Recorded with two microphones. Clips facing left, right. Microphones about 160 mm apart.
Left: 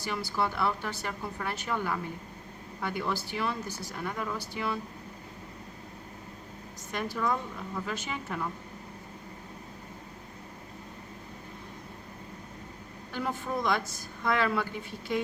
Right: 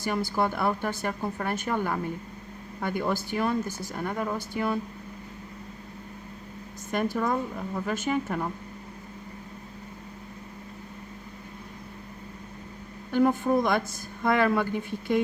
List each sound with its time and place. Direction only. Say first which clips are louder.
0.0 s speech: right 5 dB; 50° right (ahead or behind)
6.9 s speech: right 4 dB; 50° right (ahead or behind)
13.1 s speech: right 11 dB; 50° right (ahead or behind)